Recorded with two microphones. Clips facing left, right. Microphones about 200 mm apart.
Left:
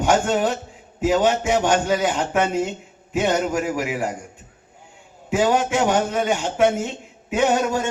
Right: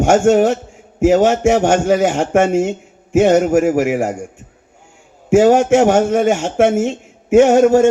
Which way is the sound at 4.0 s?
75° right (ahead or behind).